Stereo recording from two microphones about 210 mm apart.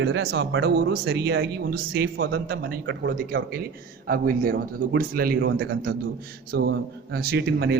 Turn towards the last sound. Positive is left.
turn(degrees=-55)  # may be behind; listen again after turning